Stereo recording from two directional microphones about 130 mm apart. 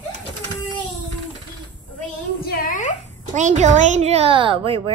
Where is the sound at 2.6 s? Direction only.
90° left.